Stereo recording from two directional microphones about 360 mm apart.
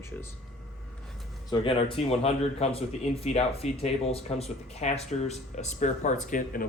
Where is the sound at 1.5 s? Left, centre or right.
Centre.